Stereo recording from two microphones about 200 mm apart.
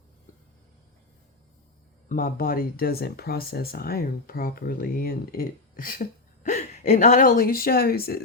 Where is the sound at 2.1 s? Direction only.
45° left (ahead or behind).